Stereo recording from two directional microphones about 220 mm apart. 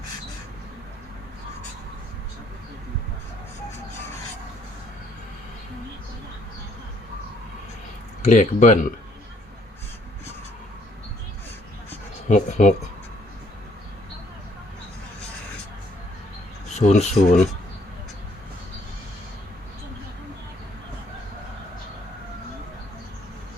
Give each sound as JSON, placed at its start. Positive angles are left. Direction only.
{"t": 8.2, "sound": "speech", "side_deg": 30}
{"t": 12.3, "sound": "speech", "side_deg": 35}
{"t": 16.7, "sound": "speech", "side_deg": 30}